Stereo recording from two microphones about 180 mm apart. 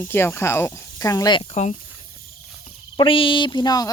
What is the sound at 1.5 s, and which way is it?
Speech, 40° left (ahead or behind).